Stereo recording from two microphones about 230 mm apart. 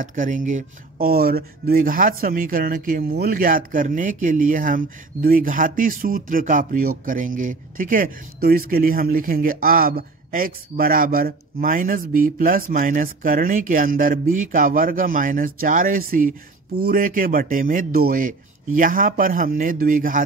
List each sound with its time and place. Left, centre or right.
0.0 s speech: right